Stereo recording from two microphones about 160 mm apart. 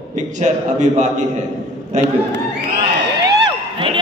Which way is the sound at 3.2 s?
30° right (ahead or behind).